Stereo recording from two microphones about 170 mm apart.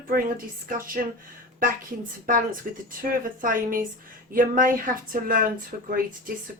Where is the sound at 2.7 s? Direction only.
55° right (ahead or behind).